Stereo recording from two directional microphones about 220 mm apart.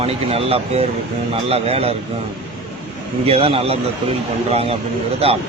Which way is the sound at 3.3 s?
25° right (ahead or behind).